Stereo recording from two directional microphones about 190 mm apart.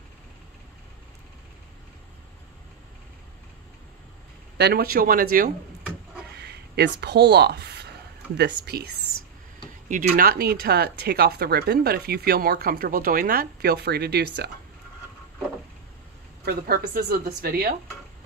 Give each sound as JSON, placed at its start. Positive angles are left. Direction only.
{"t": 4.6, "sound": "speech", "side_deg": -55}
{"t": 6.3, "sound": "a sound", "side_deg": -60}
{"t": 8.4, "sound": "speech", "side_deg": -60}
{"t": 9.8, "sound": "speech", "side_deg": -45}
{"t": 16.4, "sound": "speech", "side_deg": -50}